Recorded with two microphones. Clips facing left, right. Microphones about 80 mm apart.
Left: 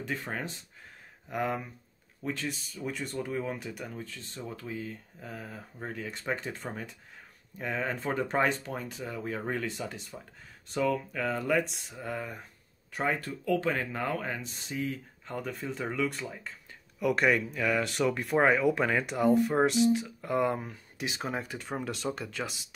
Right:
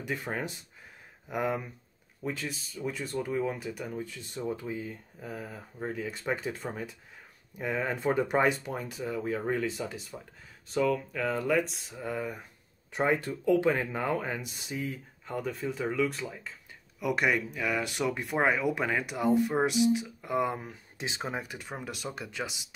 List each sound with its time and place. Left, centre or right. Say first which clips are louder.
0.0 s speech: right 1 dB; centre
3.9 s speech: right 4 dB; centre
12.9 s speech: right 3 dB; centre
17.0 s speech: left 2 dB; centre
21.0 s speech: left 1 dB; right
21.3 s speech: left 2 dB; centre